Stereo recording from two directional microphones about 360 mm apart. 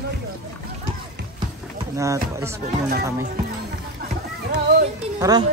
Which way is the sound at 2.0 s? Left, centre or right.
Centre.